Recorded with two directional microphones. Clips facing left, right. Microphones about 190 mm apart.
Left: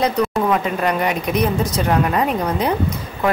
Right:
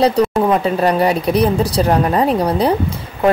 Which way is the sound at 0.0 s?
30° right (ahead or behind).